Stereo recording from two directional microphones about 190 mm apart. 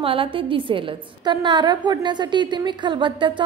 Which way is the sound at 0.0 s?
30° right (ahead or behind).